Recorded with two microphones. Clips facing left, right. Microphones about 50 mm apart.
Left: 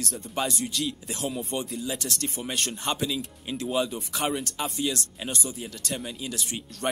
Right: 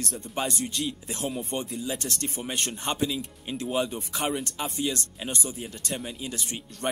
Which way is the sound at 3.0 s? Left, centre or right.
Centre.